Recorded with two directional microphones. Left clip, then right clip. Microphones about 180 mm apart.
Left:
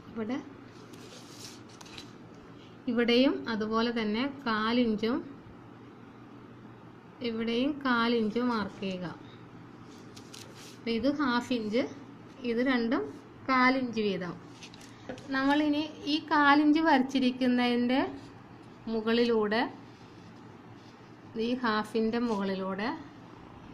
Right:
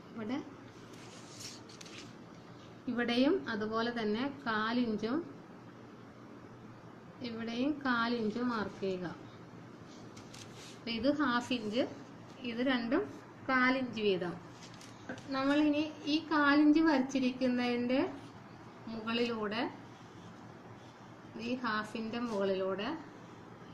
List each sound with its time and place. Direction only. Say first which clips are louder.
0.2 s speech: left 6 dB; 50° left (ahead or behind)
3.0 s a woman's voice: left 5 dB; 50° left (ahead or behind)
7.2 s a woman's voice: left 8 dB; 50° left (ahead or behind)
10.9 s a woman's voice: left 3 dB; 50° left (ahead or behind)
15.3 s a woman's voice: left 3 dB; 55° left (ahead or behind)
21.4 s a woman's voice: left 6 dB; 55° left (ahead or behind)